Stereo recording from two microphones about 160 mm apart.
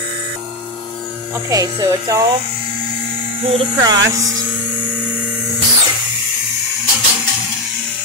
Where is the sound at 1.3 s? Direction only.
25° right (ahead or behind).